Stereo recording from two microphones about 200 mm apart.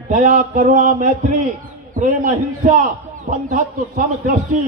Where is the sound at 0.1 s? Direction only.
40° right (ahead or behind).